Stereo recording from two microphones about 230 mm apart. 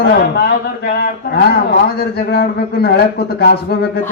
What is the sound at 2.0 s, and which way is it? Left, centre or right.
A man's voice, left.